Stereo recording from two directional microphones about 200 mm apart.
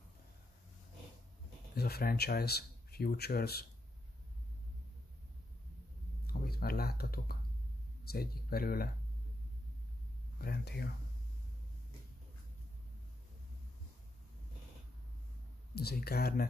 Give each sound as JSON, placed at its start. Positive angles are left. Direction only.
{"t": 1.8, "sound": "speech", "side_deg": 50}
{"t": 6.2, "sound": "a sound", "side_deg": 50}
{"t": 8.1, "sound": "speech", "side_deg": 50}
{"t": 10.4, "sound": "speech", "side_deg": 50}
{"t": 15.7, "sound": "speech", "side_deg": 50}